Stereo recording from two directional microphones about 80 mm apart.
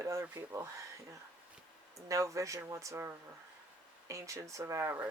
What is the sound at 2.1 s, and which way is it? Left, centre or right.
Speech, right.